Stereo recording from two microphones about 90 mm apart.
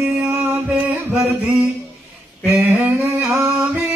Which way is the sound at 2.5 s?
20° right (ahead or behind).